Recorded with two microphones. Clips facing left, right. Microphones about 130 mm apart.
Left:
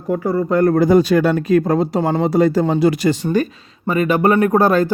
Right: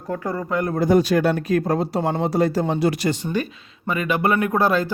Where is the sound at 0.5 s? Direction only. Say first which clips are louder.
Left 9 dB; 50° left (ahead or behind).